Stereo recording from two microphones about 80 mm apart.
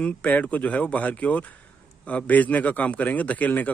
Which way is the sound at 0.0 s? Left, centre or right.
Centre.